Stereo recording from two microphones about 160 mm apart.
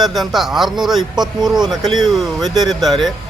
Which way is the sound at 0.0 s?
Centre (ahead or behind).